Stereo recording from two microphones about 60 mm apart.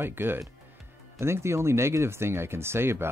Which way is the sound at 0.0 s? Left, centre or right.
Right.